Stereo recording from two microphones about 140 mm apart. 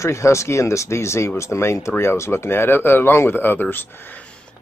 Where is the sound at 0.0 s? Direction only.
20° left (ahead or behind).